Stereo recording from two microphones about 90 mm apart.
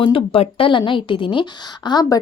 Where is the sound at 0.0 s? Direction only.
80° left.